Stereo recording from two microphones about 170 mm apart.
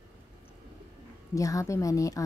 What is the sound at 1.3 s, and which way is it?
Speech, 20° left (ahead or behind).